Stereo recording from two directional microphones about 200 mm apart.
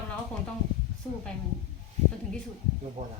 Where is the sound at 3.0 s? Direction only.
35° right (ahead or behind).